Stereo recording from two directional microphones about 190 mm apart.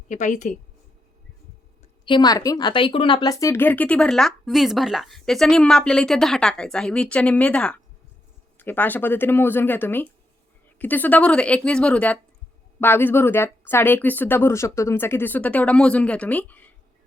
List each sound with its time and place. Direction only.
0.1 s a woman's voice: 40° left (ahead or behind)
2.0 s speech: 20° left (ahead or behind)